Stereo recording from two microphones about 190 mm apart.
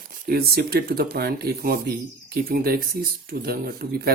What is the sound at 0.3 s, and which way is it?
Speech, 55° right (ahead or behind).